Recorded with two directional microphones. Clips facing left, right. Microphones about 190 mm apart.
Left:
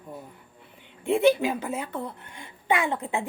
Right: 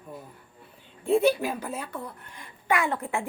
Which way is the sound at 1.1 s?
20° left (ahead or behind).